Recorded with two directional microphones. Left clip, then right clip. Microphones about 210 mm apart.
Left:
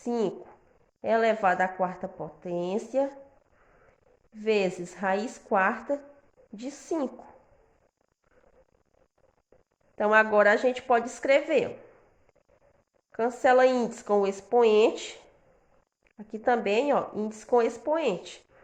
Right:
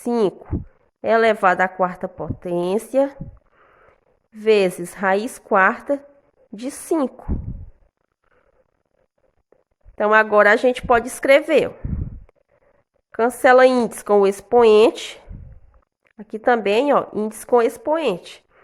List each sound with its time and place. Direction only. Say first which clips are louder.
0.0 s a woman's voice: right 9 dB; 45° right (ahead or behind)
9.9 s a woman's voice: right 7 dB; 35° right (ahead or behind)
13.1 s a woman's voice: right 9 dB; 40° right (ahead or behind)